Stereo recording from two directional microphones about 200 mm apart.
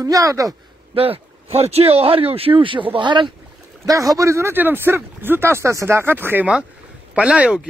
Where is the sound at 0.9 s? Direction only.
30° right (ahead or behind).